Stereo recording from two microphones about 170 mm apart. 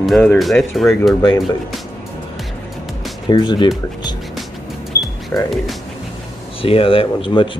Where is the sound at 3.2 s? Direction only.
25° left (ahead or behind).